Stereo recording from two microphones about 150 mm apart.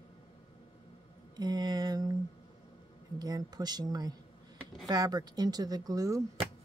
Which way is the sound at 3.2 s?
25° right (ahead or behind).